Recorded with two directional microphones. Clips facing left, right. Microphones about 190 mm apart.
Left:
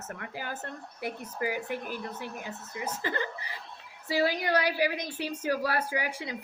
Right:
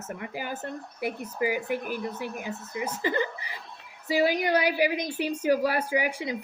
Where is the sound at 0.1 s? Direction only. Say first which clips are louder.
Right 4 dB; 15° right (ahead or behind).